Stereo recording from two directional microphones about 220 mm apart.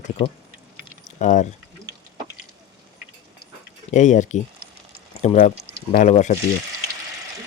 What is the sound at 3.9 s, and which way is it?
Speech, 35° left (ahead or behind).